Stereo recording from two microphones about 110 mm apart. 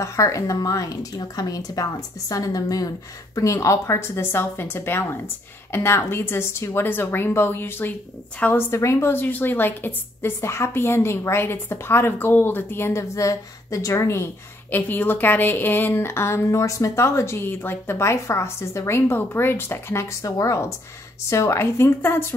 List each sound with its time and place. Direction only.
0.0 s speech: 30° left (ahead or behind)